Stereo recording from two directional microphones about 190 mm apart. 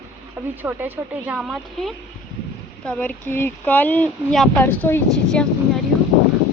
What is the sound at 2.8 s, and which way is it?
Speech, 10° left (ahead or behind).